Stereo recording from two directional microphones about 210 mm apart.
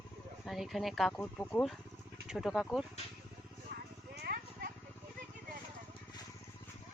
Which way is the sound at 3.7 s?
50° right (ahead or behind).